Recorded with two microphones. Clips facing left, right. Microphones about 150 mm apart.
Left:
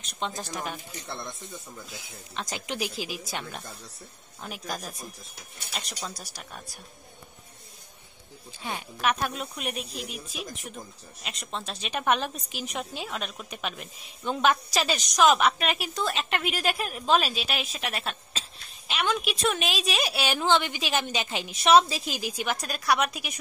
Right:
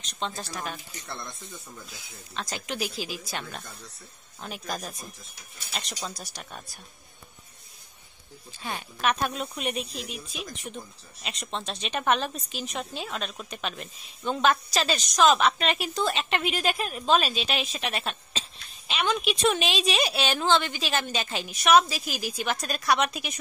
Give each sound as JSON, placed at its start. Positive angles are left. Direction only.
{"t": 0.1, "sound": "a woman's voice", "side_deg": 15}
{"t": 1.0, "sound": "speech", "side_deg": 0}
{"t": 2.3, "sound": "a woman's voice", "side_deg": 20}
{"t": 8.5, "sound": "a woman's voice", "side_deg": 15}